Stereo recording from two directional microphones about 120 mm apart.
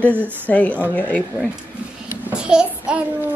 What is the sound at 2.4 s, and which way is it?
Child singing, 5° right (ahead or behind).